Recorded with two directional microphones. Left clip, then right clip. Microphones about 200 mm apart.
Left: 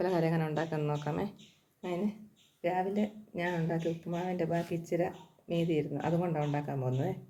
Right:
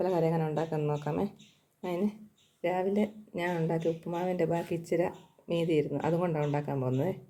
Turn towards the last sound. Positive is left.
turn(degrees=-35)  # may be behind; listen again after turning